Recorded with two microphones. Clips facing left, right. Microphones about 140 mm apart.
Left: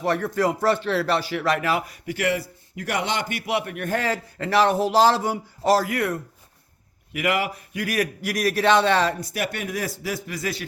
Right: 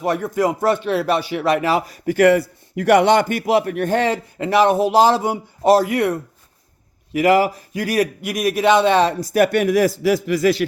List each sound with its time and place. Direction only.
0.0 s speech: 15° right (ahead or behind)
2.0 s a man's voice: 50° right (ahead or behind); by 9.1 s 20° right (ahead or behind)
9.2 s speech: 45° right (ahead or behind)
9.5 s a man's voice: 80° right